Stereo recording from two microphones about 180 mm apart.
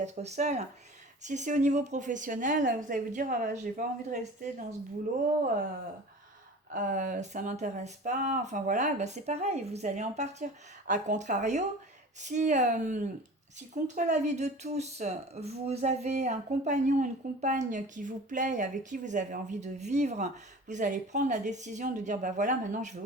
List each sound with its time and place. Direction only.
0.0 s speech: 40° right (ahead or behind)
6.7 s speech: 45° right (ahead or behind)